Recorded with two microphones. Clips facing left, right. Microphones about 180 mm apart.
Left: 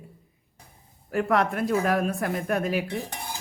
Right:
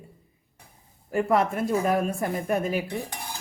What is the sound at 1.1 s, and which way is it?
Cutlery, centre (ahead or behind).